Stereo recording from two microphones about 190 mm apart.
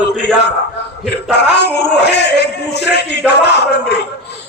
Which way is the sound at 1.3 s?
60° left (ahead or behind).